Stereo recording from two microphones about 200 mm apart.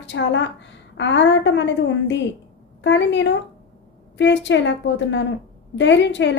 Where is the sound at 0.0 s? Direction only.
65° left (ahead or behind).